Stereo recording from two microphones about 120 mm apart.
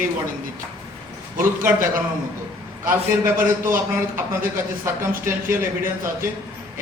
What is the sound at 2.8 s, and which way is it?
A man's voice, 20° right (ahead or behind).